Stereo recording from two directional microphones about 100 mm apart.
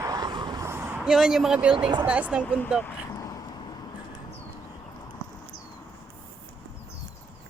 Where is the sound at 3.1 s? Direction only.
35° left (ahead or behind).